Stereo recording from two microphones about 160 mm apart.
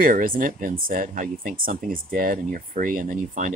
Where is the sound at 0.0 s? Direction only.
60° right (ahead or behind).